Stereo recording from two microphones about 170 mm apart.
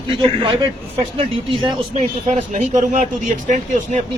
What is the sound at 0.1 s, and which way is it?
A man's voice, 30° right (ahead or behind).